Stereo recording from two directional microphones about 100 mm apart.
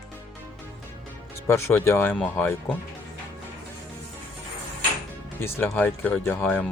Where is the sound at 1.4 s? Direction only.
25° left (ahead or behind).